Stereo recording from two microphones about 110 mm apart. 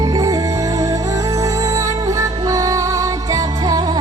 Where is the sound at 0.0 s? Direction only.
30° right (ahead or behind).